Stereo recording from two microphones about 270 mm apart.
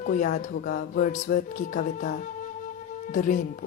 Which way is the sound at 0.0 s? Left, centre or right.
Left.